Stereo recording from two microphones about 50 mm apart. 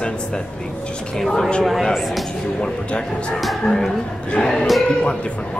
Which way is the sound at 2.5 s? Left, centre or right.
Centre.